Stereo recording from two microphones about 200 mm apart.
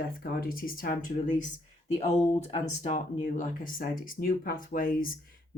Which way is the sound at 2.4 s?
35° left (ahead or behind).